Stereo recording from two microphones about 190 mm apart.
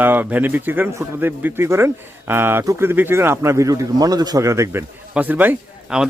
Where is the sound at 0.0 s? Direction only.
10° right (ahead or behind).